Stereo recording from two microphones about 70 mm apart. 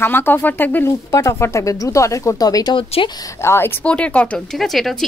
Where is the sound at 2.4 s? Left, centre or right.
Left.